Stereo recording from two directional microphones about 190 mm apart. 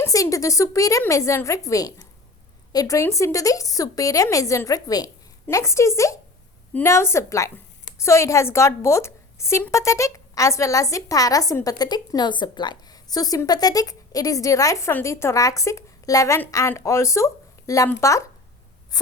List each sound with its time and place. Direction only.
0.0 s a woman's voice: 15° left (ahead or behind)